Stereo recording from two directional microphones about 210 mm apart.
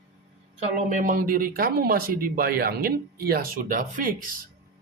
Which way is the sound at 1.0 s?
40° right (ahead or behind).